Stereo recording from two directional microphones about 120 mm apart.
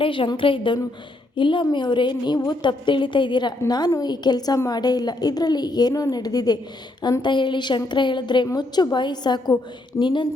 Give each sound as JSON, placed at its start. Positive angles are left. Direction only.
{"t": 0.0, "sound": "a woman's voice", "side_deg": 45}